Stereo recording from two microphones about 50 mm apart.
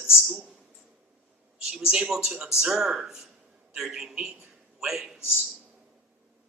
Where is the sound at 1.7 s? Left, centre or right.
Centre.